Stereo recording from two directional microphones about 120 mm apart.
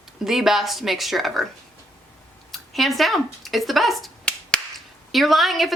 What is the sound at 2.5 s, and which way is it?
A woman's voice, centre (ahead or behind).